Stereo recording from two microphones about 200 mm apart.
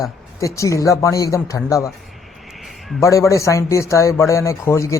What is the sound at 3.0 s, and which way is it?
Speech, 15° left (ahead or behind).